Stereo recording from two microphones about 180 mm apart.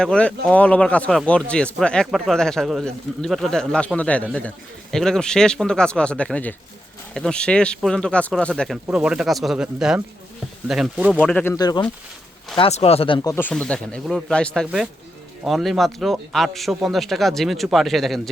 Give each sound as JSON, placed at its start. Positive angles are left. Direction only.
{"t": 0.0, "sound": "speech", "side_deg": 5}
{"t": 11.2, "sound": "speech", "side_deg": 10}
{"t": 11.5, "sound": "speech", "side_deg": 20}
{"t": 12.5, "sound": "speech", "side_deg": 35}
{"t": 13.3, "sound": "speech", "side_deg": 10}